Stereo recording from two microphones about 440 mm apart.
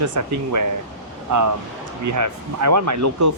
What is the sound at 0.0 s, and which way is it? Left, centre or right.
Speech, right.